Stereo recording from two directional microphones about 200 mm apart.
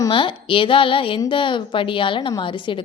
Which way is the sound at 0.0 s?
25° left (ahead or behind).